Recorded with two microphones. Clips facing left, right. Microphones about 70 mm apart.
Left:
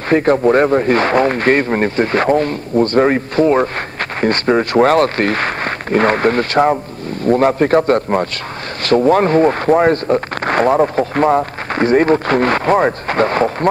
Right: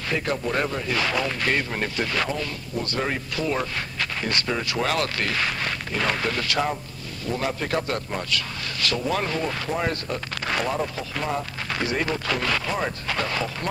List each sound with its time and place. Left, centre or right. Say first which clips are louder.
0.1 s speech: left 14 dB; left